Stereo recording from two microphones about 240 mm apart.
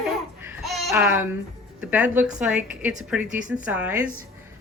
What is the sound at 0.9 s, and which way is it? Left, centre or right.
A woman's voice, centre.